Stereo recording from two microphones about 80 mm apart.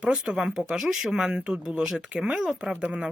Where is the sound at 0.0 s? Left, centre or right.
Centre.